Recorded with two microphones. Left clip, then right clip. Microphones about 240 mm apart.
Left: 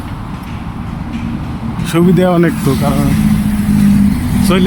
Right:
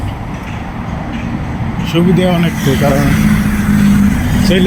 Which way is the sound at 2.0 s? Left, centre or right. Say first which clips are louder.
Left 2 dB; centre.